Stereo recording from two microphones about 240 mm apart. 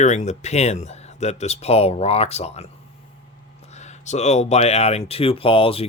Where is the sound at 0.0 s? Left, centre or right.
Left.